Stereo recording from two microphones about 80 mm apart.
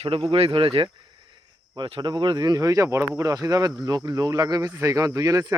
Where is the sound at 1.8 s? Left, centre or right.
Right.